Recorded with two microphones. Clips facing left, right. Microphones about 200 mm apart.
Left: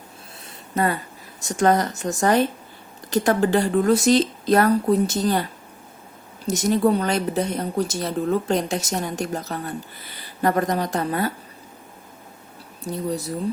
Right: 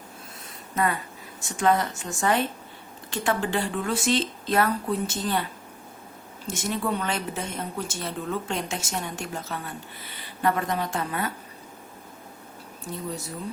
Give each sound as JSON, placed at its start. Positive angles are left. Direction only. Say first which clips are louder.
{"t": 1.4, "sound": "a woman's voice", "louder": "left 4 dB", "side_deg": 40}
{"t": 6.5, "sound": "a woman's voice", "louder": "left 9 dB", "side_deg": 40}
{"t": 12.8, "sound": "speech", "louder": "left 7 dB", "side_deg": 35}